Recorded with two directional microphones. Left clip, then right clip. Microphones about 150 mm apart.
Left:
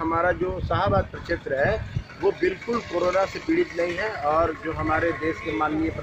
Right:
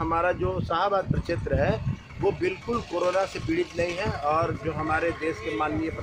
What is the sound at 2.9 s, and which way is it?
Speech, centre (ahead or behind).